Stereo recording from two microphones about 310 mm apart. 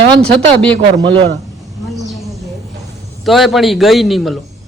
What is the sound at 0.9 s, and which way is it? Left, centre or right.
Speech, centre.